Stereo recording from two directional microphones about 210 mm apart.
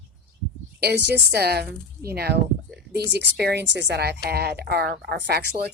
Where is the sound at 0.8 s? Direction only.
50° right (ahead or behind).